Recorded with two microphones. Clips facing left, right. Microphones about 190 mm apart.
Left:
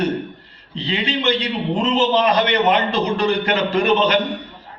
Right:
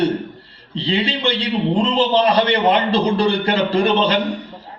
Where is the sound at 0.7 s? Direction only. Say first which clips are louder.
Right 2 dB; 30° right (ahead or behind).